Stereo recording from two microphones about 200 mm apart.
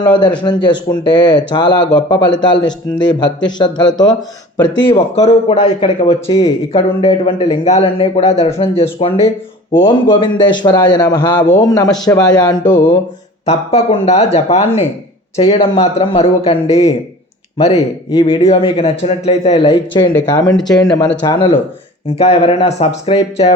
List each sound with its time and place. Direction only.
0.0 s a man's voice: 25° left (ahead or behind)
4.9 s a man's voice: 30° left (ahead or behind)